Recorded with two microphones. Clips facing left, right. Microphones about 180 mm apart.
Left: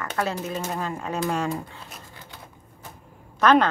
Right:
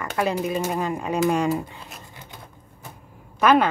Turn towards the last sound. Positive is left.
turn(degrees=-10)  # may be behind; listen again after turning